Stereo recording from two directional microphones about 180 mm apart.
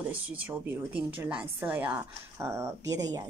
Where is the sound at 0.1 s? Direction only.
10° right (ahead or behind).